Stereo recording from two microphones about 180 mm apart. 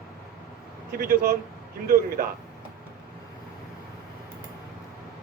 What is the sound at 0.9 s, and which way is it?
A man's voice, 55° right (ahead or behind).